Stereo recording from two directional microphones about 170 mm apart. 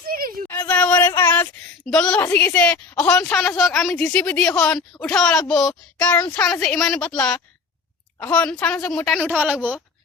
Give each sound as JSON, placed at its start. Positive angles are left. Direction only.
{"t": 0.1, "sound": "a sound", "side_deg": -55}
{"t": 0.4, "sound": "female singing", "side_deg": 10}
{"t": 1.9, "sound": "a woman's voice", "side_deg": 5}
{"t": 9.4, "sound": "a woman's voice", "side_deg": -10}